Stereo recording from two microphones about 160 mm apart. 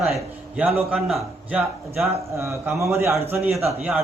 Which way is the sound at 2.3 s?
15° right (ahead or behind).